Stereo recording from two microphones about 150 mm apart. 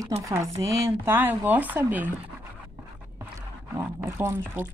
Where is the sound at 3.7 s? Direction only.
15° right (ahead or behind).